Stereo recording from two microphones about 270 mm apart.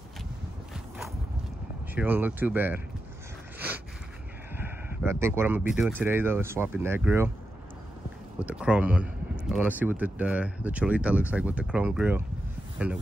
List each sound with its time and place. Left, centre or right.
2.0 s speech: centre
3.5 s a sound: centre
4.6 s speech: centre
8.4 s speech: centre